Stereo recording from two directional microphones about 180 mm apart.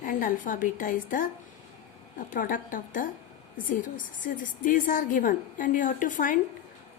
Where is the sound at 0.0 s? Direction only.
50° left (ahead or behind).